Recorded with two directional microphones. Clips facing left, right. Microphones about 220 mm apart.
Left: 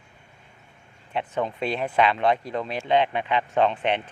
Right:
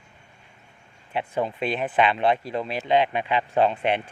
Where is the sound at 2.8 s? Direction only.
10° right (ahead or behind).